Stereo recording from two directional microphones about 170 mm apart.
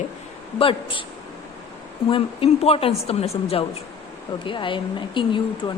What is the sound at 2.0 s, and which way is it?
A woman's voice, 35° left (ahead or behind).